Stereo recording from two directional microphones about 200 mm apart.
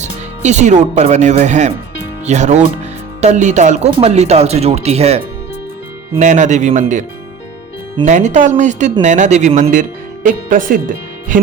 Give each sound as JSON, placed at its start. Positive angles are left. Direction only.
{"t": 0.4, "sound": "speech", "side_deg": -35}
{"t": 8.0, "sound": "speech", "side_deg": -35}